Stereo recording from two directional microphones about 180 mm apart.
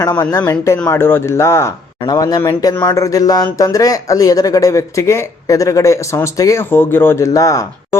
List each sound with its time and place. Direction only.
0.0 s speech: 20° left (ahead or behind)